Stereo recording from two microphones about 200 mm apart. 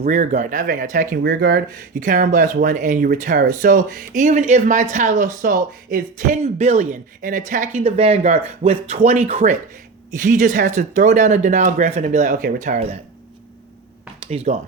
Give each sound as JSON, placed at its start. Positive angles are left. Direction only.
{"t": 0.0, "sound": "speech", "side_deg": -40}
{"t": 14.3, "sound": "speech", "side_deg": -30}